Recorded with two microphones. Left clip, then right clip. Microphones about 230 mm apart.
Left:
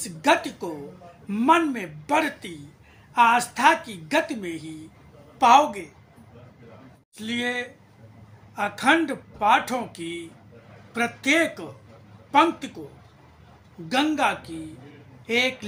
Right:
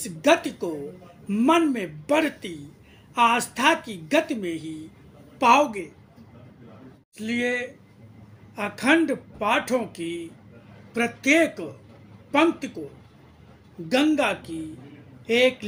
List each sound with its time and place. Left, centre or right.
0.0 s speech: centre
7.2 s speech: centre
13.8 s speech: centre